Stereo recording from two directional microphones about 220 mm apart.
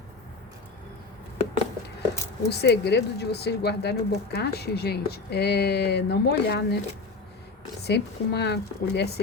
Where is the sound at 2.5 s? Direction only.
45° left (ahead or behind).